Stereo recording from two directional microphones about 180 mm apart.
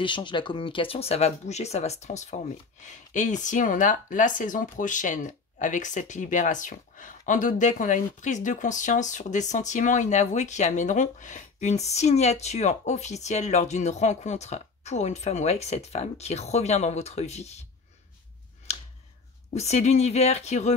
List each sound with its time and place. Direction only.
0.0 s speech: 25° left (ahead or behind)
18.7 s a sound: 35° left (ahead or behind)
19.5 s speech: 35° left (ahead or behind)